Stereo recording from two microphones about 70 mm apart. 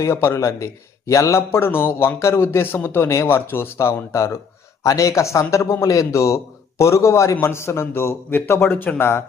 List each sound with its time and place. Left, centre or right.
0.0 s speech: left
4.8 s a man's voice: left